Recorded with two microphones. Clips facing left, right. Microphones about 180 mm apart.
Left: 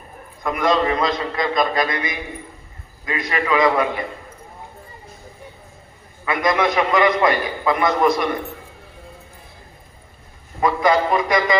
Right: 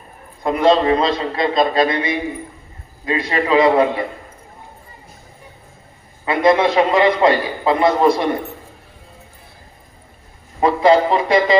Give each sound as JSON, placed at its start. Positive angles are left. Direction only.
{"t": 0.4, "sound": "a man's voice", "side_deg": -30}
{"t": 6.2, "sound": "a man's voice", "side_deg": -30}
{"t": 10.6, "sound": "a man's voice", "side_deg": -30}